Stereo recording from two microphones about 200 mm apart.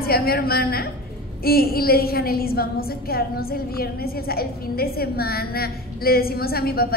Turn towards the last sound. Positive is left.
turn(degrees=50)  # may be behind; listen again after turning